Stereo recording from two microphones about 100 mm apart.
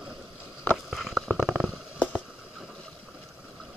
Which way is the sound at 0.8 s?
5° right (ahead or behind).